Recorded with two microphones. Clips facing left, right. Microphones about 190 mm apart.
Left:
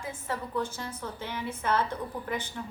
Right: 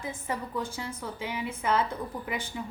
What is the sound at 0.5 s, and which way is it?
A woman's voice, 10° right (ahead or behind).